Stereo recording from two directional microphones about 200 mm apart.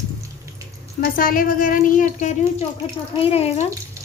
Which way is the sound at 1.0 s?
45° left (ahead or behind).